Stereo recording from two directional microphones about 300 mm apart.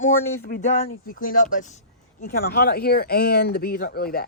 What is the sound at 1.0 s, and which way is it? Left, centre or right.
Speech, left.